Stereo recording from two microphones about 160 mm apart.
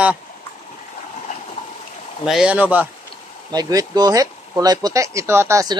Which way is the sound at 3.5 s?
25° right (ahead or behind).